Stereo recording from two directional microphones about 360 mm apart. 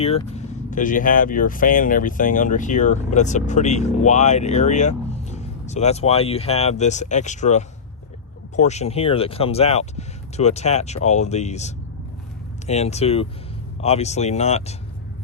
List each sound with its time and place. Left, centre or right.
0.0 s speech: centre